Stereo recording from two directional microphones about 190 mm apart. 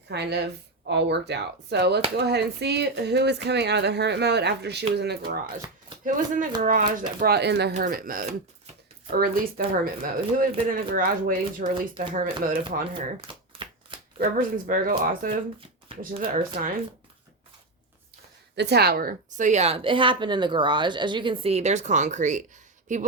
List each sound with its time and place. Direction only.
0.1 s speech: 60° right (ahead or behind)
6.1 s speech: 45° right (ahead or behind)
7.2 s speech: 55° right (ahead or behind)
7.8 s speech: 50° right (ahead or behind)
12.9 s shuffling cards: 25° right (ahead or behind)
14.2 s speech: 50° right (ahead or behind)
18.5 s a woman's voice: 60° right (ahead or behind); by 23.0 s 40° right (ahead or behind)